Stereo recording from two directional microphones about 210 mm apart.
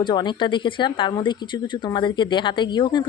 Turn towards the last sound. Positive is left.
turn(degrees=20)  # may be behind; listen again after turning